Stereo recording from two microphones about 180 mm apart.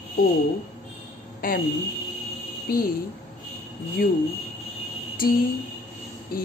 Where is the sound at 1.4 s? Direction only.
55° left (ahead or behind).